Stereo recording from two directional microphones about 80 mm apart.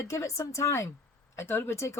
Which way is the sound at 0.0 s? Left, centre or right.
Left.